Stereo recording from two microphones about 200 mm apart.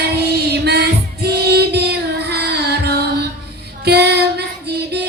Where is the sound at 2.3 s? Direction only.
55° right (ahead or behind).